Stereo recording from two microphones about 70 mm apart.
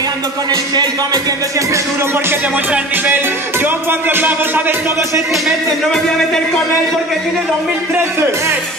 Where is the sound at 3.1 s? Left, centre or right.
Right.